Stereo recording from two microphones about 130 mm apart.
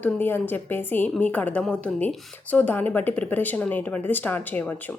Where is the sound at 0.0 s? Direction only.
15° left (ahead or behind).